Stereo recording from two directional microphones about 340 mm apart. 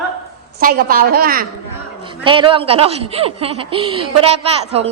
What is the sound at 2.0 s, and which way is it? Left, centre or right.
Speech, centre.